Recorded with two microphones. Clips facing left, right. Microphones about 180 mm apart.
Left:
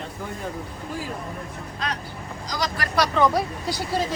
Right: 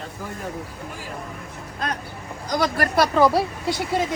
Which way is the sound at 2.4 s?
55° right (ahead or behind).